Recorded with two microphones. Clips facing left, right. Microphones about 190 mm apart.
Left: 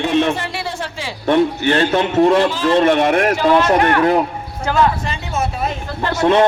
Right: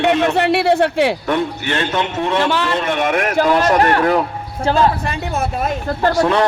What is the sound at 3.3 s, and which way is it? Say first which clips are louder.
Speech: even; 45° right (ahead or behind).